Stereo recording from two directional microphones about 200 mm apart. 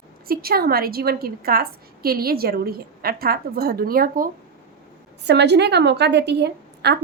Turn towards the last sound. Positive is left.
turn(degrees=-55)  # may be behind; listen again after turning